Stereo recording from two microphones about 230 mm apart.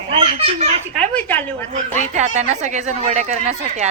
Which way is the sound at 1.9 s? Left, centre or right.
Right.